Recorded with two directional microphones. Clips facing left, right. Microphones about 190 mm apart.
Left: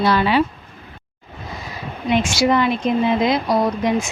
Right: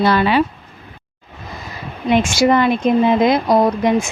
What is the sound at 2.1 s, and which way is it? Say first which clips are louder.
Speech: right 3 dB; 50° right (ahead or behind).